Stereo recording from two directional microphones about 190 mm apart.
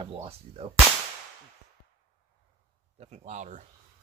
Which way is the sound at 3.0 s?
35° right (ahead or behind).